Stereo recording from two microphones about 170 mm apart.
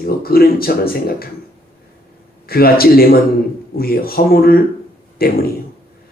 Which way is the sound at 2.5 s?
60° left (ahead or behind).